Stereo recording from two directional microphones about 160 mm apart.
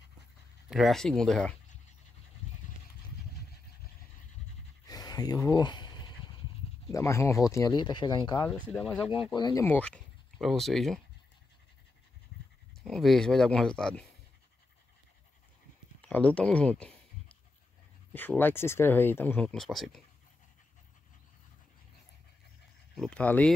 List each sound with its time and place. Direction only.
0.7 s speech: centre (ahead or behind)
4.8 s a sound: 25° left (ahead or behind)
6.9 s speech: 20° left (ahead or behind)
8.7 s speech: 5° left (ahead or behind)
9.3 s speech: 25° left (ahead or behind); by 11.0 s centre (ahead or behind)
12.8 s speech: centre (ahead or behind)
16.0 s speech: 10° left (ahead or behind)
18.1 s speech: 10° left (ahead or behind)
22.9 s speech: 5° left (ahead or behind)